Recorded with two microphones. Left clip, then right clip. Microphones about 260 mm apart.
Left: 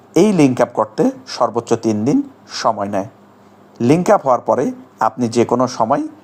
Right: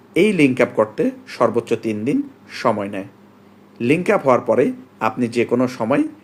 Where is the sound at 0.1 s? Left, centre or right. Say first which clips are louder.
Left 3 dB; left.